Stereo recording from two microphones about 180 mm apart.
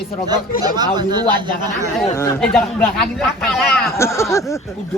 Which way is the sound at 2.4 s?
5° left (ahead or behind).